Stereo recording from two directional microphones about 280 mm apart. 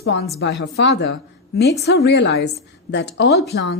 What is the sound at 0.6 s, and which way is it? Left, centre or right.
A woman's voice, left.